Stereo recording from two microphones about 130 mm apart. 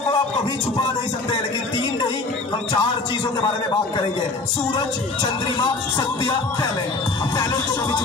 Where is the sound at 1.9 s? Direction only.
30° left (ahead or behind).